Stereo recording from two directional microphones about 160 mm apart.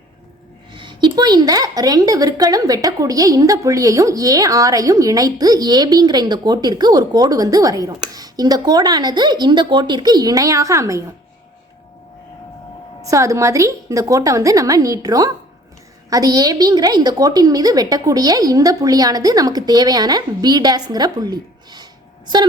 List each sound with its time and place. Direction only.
0.7 s a woman's voice: 30° right (ahead or behind)
13.1 s a woman's voice: 20° right (ahead or behind)